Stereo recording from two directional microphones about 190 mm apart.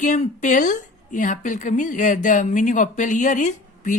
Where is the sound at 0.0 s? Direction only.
40° left (ahead or behind).